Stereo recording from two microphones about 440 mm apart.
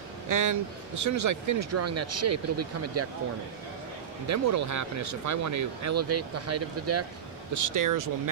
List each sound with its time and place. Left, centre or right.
0.3 s speech: right
4.3 s speech: right